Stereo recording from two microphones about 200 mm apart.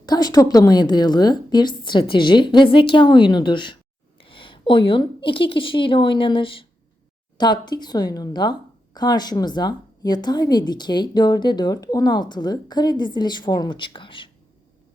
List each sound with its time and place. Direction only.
0.0 s speech: 20° left (ahead or behind)